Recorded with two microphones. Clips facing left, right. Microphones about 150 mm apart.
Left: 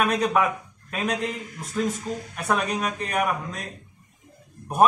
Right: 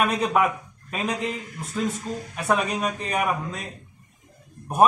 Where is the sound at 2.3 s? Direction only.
Centre (ahead or behind).